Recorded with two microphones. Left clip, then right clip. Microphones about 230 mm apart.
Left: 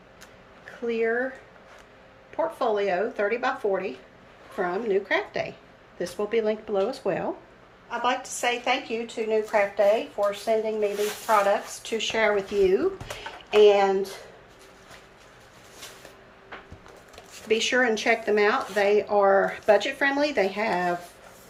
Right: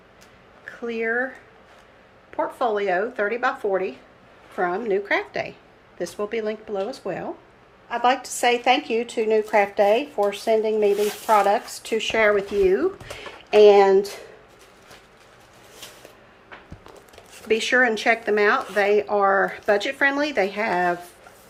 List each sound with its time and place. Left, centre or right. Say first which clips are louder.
0.9 s speech: left 1 dB; centre
2.3 s speech: right 2 dB; centre
7.9 s speech: right 5 dB; centre
13.5 s speech: right 5 dB; right
17.5 s speech: right 3 dB; centre